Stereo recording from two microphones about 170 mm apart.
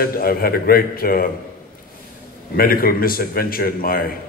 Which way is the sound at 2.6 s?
60° left (ahead or behind).